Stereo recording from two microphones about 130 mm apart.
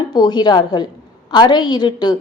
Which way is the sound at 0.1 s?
35° left (ahead or behind).